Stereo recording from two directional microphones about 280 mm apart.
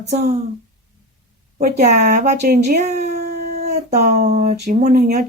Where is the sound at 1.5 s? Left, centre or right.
Right.